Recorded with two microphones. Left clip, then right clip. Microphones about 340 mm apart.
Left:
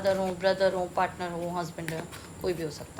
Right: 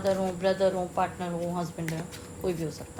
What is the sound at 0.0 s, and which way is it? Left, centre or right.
A woman's voice, centre.